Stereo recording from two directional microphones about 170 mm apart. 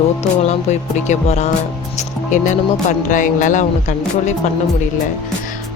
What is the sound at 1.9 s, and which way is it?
Speech, 45° left (ahead or behind).